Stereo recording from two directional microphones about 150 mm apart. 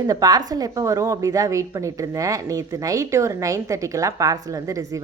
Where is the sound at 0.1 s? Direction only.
25° right (ahead or behind).